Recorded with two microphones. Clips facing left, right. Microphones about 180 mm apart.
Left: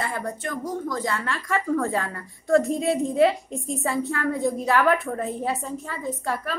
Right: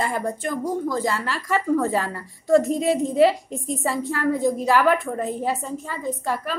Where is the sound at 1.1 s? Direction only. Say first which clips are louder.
Right 2 dB; 5° right (ahead or behind).